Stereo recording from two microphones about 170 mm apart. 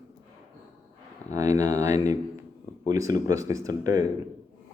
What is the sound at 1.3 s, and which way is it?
Speech, 20° right (ahead or behind).